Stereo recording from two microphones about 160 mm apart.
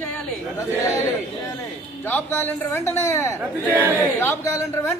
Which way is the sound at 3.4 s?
10° right (ahead or behind).